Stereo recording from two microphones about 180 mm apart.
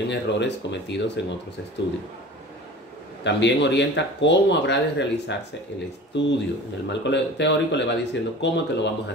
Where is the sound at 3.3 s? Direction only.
75° left (ahead or behind).